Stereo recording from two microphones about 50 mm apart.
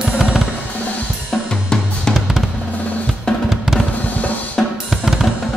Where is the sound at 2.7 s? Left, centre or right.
Left.